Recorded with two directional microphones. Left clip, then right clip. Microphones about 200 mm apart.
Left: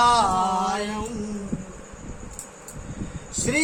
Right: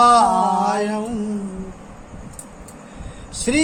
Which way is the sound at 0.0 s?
10° right (ahead or behind).